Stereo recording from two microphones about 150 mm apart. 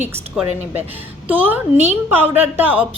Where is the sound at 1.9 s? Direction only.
15° right (ahead or behind).